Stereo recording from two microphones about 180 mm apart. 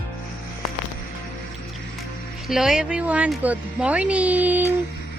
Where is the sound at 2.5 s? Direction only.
5° right (ahead or behind).